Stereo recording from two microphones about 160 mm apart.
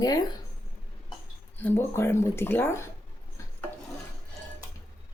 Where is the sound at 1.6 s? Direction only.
15° left (ahead or behind).